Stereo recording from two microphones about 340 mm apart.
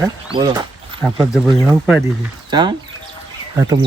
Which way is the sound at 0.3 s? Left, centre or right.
Centre.